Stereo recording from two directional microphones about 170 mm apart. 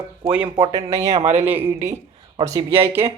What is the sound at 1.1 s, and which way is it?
Speech, 40° right (ahead or behind).